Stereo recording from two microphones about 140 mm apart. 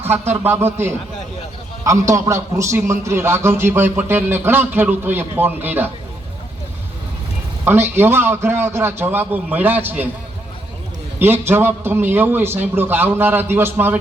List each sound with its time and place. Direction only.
0.1 s a man's voice: 15° right (ahead or behind)
7.6 s a man's voice: 15° right (ahead or behind)
11.2 s a man's voice: 15° right (ahead or behind)